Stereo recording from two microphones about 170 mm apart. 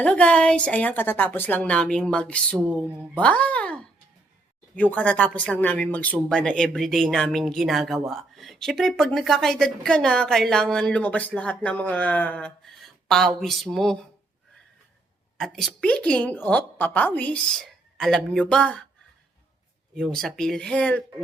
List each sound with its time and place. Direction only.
0.0 s a woman's voice: 5° left (ahead or behind)
15.4 s a woman's voice: centre (ahead or behind)
20.0 s speech: 5° left (ahead or behind)